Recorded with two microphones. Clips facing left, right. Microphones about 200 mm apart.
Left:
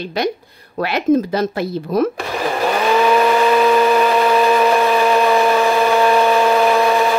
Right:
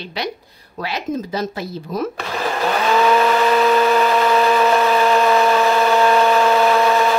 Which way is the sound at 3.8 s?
10° left (ahead or behind).